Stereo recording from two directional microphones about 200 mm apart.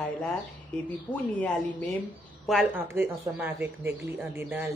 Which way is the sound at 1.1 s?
5° left (ahead or behind).